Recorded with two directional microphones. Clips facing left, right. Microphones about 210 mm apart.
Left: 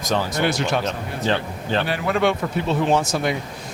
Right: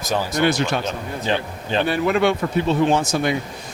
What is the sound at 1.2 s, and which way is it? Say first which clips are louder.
Speech: left 1 dB; 15° right (ahead or behind).